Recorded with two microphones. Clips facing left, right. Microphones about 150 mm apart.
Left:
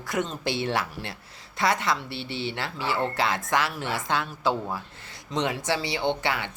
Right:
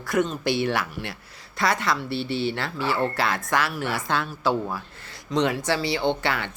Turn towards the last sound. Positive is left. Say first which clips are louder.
# right 2 dB
turn(degrees=20)  # may be behind; listen again after turning